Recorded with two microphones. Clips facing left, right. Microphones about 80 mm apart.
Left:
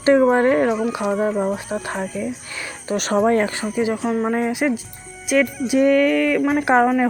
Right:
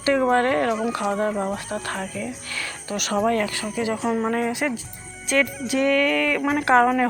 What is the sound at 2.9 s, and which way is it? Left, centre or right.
Speech, left.